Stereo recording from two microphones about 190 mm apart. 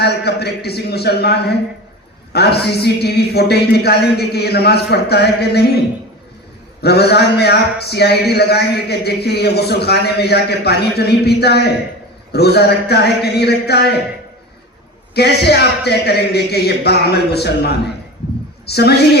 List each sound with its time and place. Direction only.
0.0 s speech: 60° left (ahead or behind)
6.8 s speech: 60° left (ahead or behind)
15.1 s speech: 60° left (ahead or behind)